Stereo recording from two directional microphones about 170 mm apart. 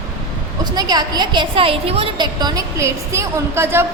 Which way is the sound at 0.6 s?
25° right (ahead or behind).